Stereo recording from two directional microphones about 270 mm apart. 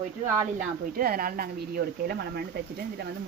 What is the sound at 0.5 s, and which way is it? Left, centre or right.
Speech, right.